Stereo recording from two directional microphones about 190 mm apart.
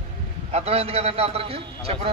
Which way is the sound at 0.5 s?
35° right (ahead or behind).